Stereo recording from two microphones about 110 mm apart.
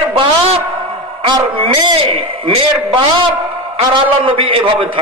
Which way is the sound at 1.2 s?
45° right (ahead or behind).